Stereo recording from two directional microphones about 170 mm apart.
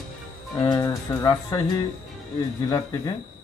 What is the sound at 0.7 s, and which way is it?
Speech, 20° left (ahead or behind).